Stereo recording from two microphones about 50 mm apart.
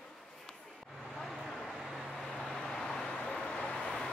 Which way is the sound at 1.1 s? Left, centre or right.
Centre.